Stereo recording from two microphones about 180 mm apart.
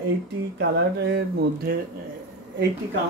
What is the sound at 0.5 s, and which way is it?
Speech, 65° right (ahead or behind).